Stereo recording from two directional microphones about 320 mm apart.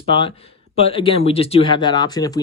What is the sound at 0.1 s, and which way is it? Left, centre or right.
Speech, centre.